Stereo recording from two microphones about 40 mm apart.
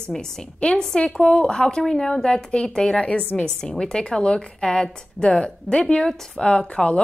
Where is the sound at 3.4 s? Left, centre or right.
Centre.